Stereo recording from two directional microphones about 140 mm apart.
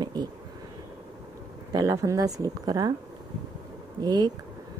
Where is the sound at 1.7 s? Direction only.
25° right (ahead or behind).